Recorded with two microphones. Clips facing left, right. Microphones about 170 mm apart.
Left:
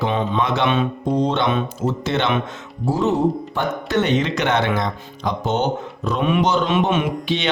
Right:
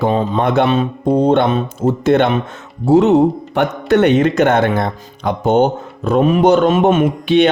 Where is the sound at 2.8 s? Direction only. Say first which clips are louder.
Right 8 dB; 70° right (ahead or behind).